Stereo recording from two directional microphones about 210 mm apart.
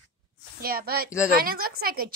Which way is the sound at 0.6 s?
45° right (ahead or behind).